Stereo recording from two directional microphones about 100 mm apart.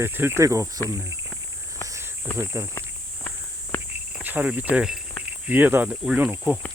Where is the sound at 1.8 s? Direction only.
30° right (ahead or behind).